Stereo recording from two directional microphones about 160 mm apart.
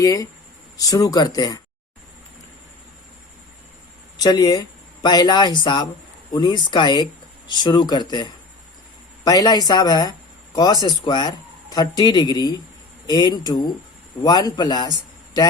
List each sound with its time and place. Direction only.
0.0 s speech: 20° left (ahead or behind)
4.2 s speech: 25° left (ahead or behind)